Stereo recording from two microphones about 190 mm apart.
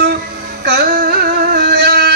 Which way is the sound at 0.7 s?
55° right (ahead or behind).